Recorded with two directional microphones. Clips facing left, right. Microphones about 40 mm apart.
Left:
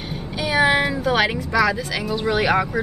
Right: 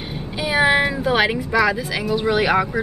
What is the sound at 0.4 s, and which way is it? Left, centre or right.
Speech, centre.